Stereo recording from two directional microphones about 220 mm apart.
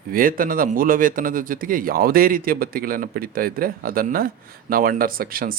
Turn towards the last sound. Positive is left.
turn(degrees=-40)  # may be behind; listen again after turning